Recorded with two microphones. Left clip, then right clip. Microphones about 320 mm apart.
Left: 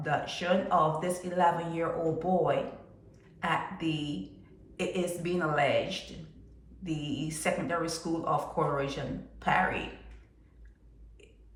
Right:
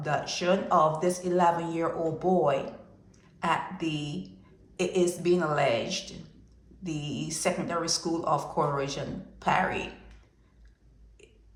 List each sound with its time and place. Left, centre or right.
0.0 s a man's voice: centre